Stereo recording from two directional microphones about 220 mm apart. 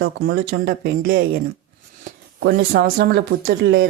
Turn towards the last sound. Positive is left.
turn(degrees=-45)  # may be behind; listen again after turning